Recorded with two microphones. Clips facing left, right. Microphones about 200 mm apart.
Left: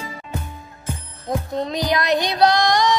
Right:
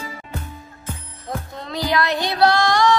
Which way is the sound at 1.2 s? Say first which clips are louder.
Left 7 dB; 20° left (ahead or behind).